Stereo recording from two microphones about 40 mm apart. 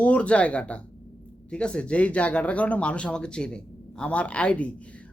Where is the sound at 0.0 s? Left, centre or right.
Left.